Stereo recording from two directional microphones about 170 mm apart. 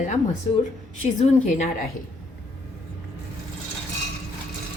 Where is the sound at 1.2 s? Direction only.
45° left (ahead or behind).